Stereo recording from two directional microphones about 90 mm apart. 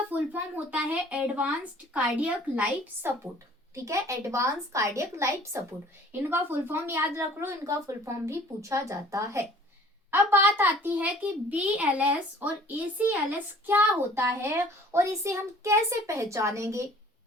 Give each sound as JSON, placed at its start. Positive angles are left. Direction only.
{"t": 0.1, "sound": "speech", "side_deg": -15}
{"t": 3.8, "sound": "speech", "side_deg": -35}
{"t": 10.1, "sound": "speech", "side_deg": -25}